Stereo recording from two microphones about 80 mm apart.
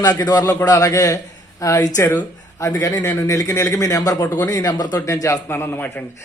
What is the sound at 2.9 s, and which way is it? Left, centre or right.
Speech, left.